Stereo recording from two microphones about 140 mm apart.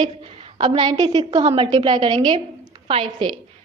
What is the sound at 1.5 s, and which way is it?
A woman's voice, 40° right (ahead or behind).